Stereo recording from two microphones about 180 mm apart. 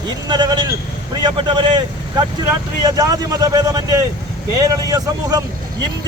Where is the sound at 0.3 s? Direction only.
25° right (ahead or behind).